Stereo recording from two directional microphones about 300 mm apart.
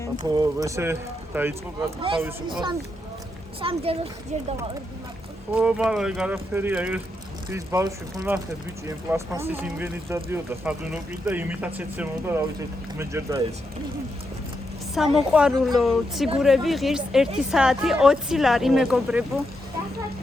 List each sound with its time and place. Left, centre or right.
0.3 s speech: centre
5.5 s speech: centre
14.9 s speech: centre